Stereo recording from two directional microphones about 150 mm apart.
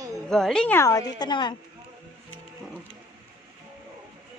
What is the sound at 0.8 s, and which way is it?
Speech, 25° left (ahead or behind).